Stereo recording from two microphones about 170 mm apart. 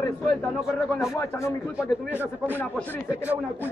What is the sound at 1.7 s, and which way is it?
Speech, 10° right (ahead or behind).